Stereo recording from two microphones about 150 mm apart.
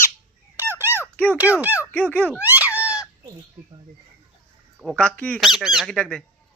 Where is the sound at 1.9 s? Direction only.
10° left (ahead or behind).